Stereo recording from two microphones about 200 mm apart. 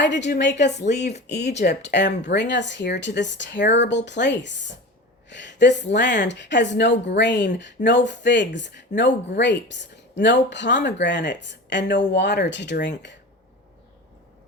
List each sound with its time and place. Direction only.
0.0 s a woman's voice: 60° left (ahead or behind)
0.9 s speech: 35° left (ahead or behind)
1.9 s a woman's voice: 60° left (ahead or behind)